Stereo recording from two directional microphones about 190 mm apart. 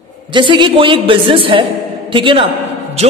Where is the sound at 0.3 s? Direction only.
25° right (ahead or behind).